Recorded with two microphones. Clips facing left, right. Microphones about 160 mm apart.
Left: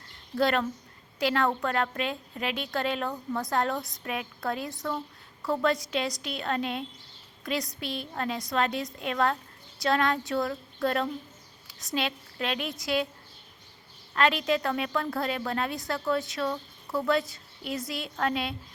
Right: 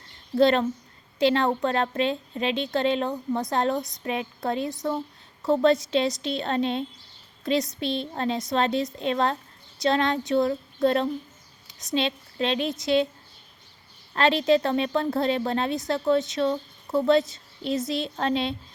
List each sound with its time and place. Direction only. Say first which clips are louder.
0.3 s a woman's voice: right 6 dB; 25° right (ahead or behind)
14.2 s a woman's voice: right 5 dB; 30° right (ahead or behind)